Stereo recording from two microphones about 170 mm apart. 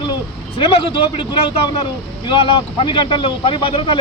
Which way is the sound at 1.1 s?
30° left (ahead or behind).